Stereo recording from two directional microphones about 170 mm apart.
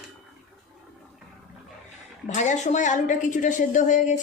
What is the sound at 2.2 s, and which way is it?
A woman's voice, 45° left (ahead or behind).